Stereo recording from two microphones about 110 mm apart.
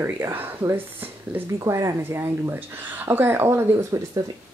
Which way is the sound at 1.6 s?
30° right (ahead or behind).